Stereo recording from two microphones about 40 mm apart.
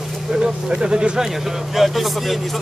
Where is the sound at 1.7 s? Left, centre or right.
Centre.